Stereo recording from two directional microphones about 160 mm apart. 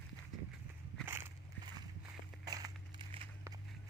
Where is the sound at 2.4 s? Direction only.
25° right (ahead or behind).